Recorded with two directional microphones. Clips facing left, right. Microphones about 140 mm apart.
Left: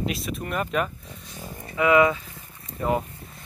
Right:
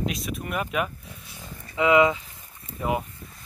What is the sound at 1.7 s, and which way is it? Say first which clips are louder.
Speech: even; 20° right (ahead or behind).